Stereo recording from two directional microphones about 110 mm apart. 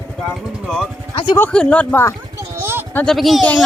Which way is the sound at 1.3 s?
10° left (ahead or behind).